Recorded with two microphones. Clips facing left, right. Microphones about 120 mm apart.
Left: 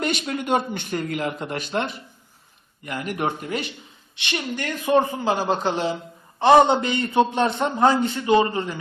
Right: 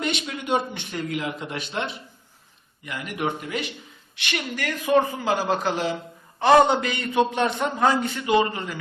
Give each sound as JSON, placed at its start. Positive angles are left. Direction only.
{"t": 0.0, "sound": "a man's voice", "side_deg": 45}
{"t": 4.1, "sound": "a woman's voice", "side_deg": 25}